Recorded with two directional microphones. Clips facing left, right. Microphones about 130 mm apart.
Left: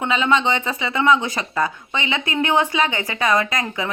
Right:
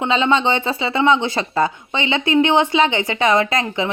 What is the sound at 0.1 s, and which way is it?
Speech, 30° right (ahead or behind).